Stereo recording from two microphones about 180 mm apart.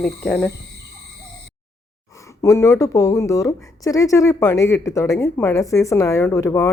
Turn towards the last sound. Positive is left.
turn(degrees=15)  # may be behind; listen again after turning